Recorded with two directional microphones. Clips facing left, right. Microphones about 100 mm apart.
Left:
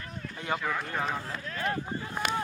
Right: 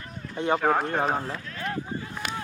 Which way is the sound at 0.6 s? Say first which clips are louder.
Right 8 dB; 50° right (ahead or behind).